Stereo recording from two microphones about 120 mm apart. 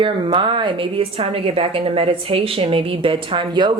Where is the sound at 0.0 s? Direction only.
45° right (ahead or behind).